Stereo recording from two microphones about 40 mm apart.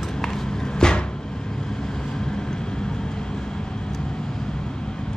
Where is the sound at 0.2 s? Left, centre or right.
Centre.